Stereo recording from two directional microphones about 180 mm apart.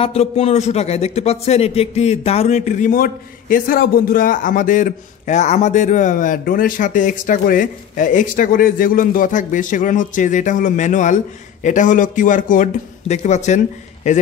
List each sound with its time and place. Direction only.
0.0 s a man's voice: 35° left (ahead or behind)